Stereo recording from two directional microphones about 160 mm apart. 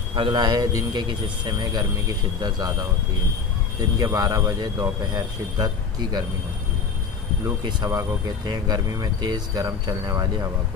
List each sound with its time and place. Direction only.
0.1 s speech: 30° right (ahead or behind)
4.0 s speech: 20° right (ahead or behind)
7.4 s speech: 25° right (ahead or behind)